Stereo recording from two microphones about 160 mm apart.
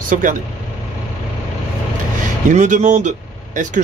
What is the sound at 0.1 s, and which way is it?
Speech, 55° right (ahead or behind).